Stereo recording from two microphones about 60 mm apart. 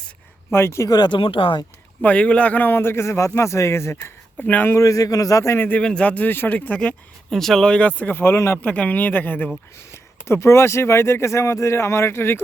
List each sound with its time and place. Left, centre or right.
0.5 s speech: left
2.0 s speech: left
4.0 s speech: left
4.7 s a man's voice: left
5.5 s speech: left
5.8 s speech: centre; by 6.5 s left
6.5 s speech: left
7.3 s speech: centre; by 8.1 s left
8.1 s speech: left
8.6 s speech: left
9.7 s speech: left